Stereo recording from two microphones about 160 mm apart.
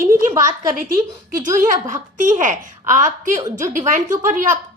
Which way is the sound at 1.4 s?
55° right (ahead or behind).